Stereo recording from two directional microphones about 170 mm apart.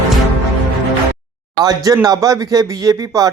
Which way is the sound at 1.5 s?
20° right (ahead or behind).